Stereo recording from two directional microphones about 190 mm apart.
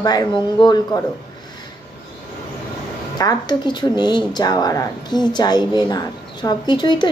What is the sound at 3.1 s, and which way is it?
Speech, 20° left (ahead or behind).